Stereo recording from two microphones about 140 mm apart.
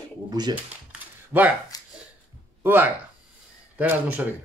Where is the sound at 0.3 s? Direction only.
30° right (ahead or behind).